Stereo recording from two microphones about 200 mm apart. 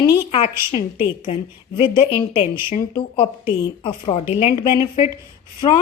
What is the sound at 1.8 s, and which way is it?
A woman's voice, 25° left (ahead or behind).